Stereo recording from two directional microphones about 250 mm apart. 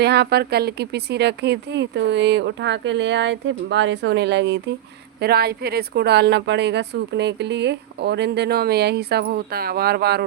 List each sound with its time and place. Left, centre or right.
0.0 s speech: right